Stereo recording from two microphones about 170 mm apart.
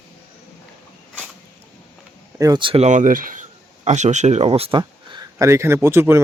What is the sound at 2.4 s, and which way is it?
Speech, 25° right (ahead or behind).